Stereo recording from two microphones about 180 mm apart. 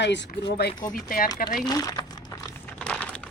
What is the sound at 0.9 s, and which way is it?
Speech, 50° left (ahead or behind).